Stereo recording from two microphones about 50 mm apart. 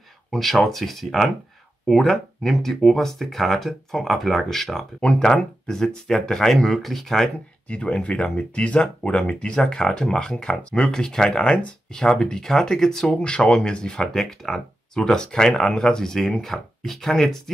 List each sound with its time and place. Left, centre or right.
0.3 s speech: centre
7.6 s speech: left; by 17.4 s centre